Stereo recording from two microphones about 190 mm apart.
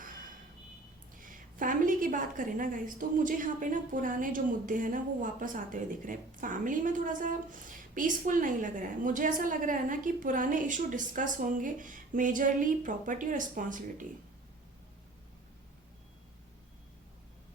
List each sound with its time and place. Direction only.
1.2 s a woman's voice: 45° right (ahead or behind)